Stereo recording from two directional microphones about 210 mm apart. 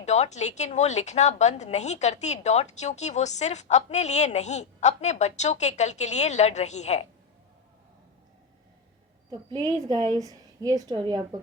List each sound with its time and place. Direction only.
0.0 s a woman's voice: 35° left (ahead or behind)
9.9 s a woman's voice: 20° right (ahead or behind)